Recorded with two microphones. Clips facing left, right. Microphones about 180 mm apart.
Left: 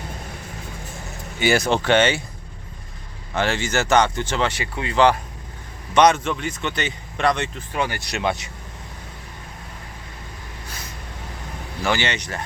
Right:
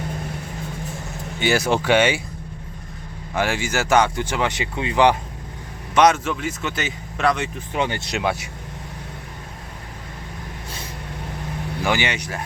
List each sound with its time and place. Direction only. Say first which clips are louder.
1.4 s speech: even; 5° right (ahead or behind)
3.3 s speech: even; 10° right (ahead or behind)
5.9 s speech: even; 5° right (ahead or behind)
7.7 s speech: right 3 dB; 20° right (ahead or behind)
8.2 s speech: left 1 dB; 10° right (ahead or behind)
11.8 s speech: even; 15° right (ahead or behind)